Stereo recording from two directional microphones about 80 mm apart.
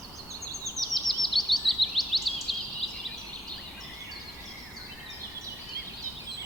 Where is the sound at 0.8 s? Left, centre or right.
Centre.